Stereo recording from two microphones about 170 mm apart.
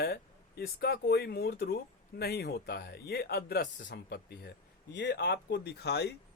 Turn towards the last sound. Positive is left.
turn(degrees=75)  # may be behind; listen again after turning